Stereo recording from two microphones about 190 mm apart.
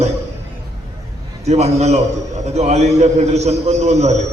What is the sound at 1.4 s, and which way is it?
A man's voice, 35° right (ahead or behind).